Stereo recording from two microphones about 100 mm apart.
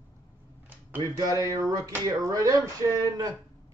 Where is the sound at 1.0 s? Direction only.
40° right (ahead or behind).